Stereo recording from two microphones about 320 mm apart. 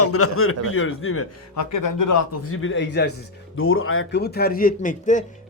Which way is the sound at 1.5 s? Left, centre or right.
Left.